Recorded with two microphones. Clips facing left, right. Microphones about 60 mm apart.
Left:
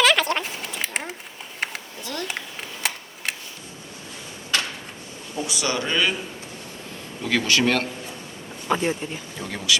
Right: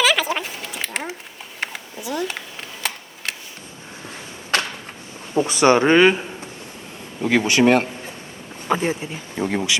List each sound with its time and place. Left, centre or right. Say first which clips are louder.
0.0 s a sound: even; centre
5.4 s speech: right 11 dB; right
7.2 s speech: right 5 dB; right
8.7 s speech: right 2 dB; centre
9.4 s speech: right 5 dB; right